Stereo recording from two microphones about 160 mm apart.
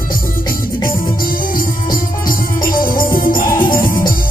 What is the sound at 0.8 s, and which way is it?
Music, 60° left (ahead or behind).